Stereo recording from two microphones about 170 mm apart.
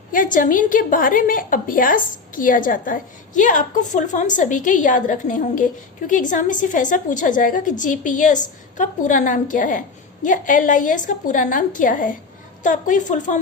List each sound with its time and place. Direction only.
0.1 s a woman's voice: 50° left (ahead or behind)